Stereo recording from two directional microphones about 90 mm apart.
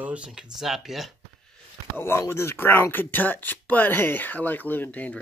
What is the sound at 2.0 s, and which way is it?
Speech, 25° left (ahead or behind).